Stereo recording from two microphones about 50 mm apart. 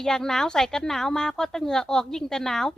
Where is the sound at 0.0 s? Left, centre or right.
Centre.